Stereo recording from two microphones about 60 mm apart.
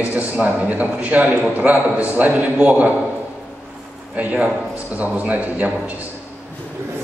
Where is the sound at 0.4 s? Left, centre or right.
Right.